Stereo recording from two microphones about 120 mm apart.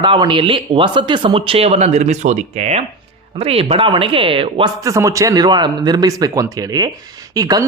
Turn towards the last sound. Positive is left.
turn(degrees=-30)  # may be behind; listen again after turning